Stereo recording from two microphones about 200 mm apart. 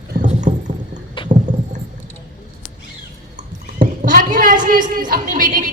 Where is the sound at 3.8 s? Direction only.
40° right (ahead or behind).